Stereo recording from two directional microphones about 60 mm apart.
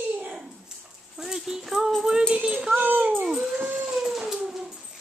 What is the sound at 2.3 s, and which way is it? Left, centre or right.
Speech, centre.